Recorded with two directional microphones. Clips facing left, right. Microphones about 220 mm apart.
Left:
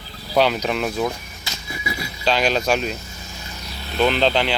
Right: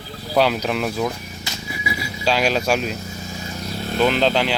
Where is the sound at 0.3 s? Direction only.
Centre (ahead or behind).